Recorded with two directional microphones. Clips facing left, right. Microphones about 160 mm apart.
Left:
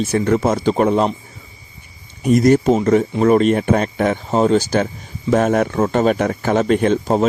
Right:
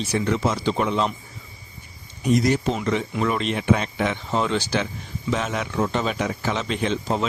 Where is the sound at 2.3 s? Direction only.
50° left (ahead or behind).